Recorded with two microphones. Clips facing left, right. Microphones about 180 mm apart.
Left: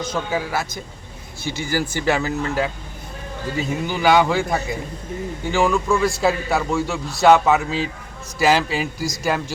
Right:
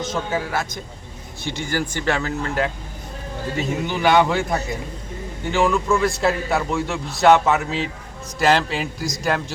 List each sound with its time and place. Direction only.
0.0 s a man's voice: centre (ahead or behind)